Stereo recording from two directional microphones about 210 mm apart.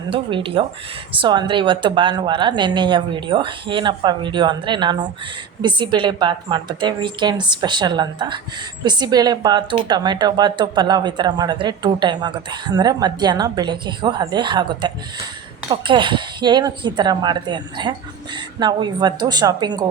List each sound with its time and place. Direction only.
0.1 s speech: 25° right (ahead or behind)